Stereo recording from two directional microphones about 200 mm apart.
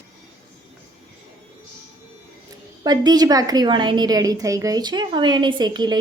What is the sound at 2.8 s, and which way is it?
A woman's voice, 20° right (ahead or behind).